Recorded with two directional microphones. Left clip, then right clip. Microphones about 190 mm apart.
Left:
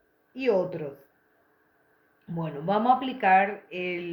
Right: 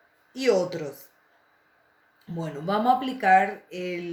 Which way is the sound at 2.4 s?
40° right (ahead or behind).